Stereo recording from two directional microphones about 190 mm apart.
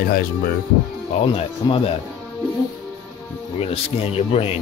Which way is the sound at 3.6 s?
30° left (ahead or behind).